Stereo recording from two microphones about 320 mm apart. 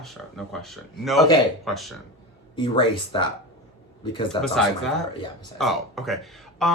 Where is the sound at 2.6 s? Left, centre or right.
Centre.